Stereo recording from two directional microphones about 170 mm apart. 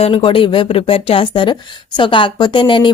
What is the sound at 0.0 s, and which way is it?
A woman's voice, 35° left (ahead or behind).